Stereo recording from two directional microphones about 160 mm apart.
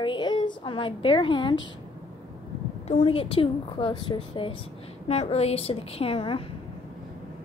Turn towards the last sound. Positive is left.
turn(degrees=35)  # may be behind; listen again after turning